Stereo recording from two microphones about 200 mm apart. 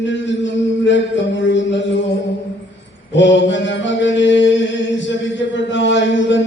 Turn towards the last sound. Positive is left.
turn(degrees=65)  # may be behind; listen again after turning